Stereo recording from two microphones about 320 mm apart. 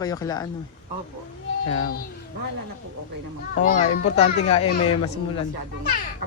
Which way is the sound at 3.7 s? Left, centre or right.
Left.